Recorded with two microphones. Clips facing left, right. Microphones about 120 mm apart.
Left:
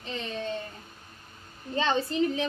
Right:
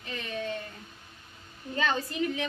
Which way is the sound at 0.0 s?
30° left (ahead or behind).